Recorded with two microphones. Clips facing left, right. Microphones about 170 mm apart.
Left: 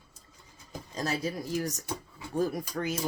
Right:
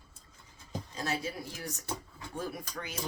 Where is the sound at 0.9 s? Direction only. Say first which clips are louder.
Left 4 dB; 40° left (ahead or behind).